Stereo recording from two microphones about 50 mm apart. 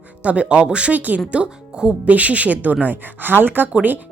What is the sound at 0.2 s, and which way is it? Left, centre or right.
Speech, right.